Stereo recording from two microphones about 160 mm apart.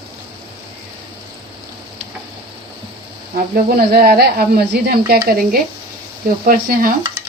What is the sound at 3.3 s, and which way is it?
Speech, 65° right (ahead or behind).